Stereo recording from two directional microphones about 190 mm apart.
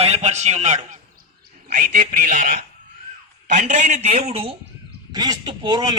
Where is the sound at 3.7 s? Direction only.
40° right (ahead or behind).